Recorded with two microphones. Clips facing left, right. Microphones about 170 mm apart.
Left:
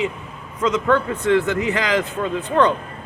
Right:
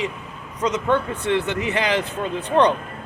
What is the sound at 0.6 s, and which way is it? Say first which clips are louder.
Speech: left 2 dB; 20° right (ahead or behind).